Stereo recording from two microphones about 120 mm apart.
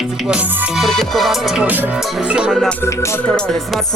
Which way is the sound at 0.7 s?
Centre (ahead or behind).